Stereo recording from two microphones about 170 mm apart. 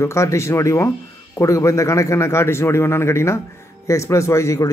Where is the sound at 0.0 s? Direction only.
15° left (ahead or behind).